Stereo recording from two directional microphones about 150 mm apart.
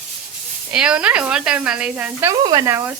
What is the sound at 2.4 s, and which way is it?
Speech, 25° right (ahead or behind).